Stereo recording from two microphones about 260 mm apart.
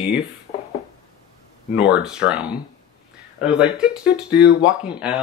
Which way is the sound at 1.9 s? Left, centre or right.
Centre.